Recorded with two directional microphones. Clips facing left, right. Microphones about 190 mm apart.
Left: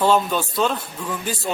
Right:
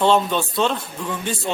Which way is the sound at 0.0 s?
5° left (ahead or behind).